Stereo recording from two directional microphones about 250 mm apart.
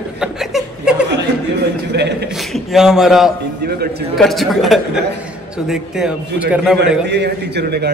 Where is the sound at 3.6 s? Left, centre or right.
Right.